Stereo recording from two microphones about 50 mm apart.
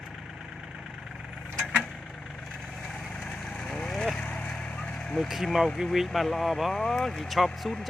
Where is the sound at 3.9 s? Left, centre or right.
Centre.